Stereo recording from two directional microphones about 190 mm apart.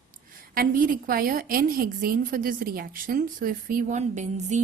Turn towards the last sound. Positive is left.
turn(degrees=-40)  # may be behind; listen again after turning